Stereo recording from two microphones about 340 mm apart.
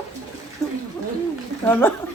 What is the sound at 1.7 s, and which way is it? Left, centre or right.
Speech, centre.